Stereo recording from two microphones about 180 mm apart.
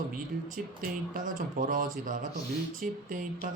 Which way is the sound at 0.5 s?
50° right (ahead or behind).